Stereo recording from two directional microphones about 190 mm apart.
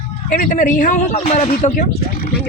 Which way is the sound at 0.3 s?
40° left (ahead or behind).